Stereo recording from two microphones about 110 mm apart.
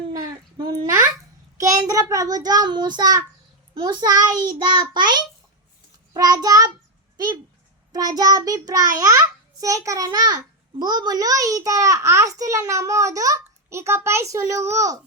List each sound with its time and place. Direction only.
1.5 s a child's voice: 30° right (ahead or behind)
7.9 s a child's voice: 35° right (ahead or behind)